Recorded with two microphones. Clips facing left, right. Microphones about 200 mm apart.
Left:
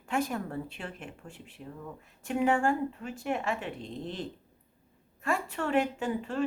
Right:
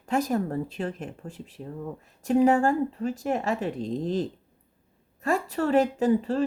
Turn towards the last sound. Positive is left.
turn(degrees=-35)  # may be behind; listen again after turning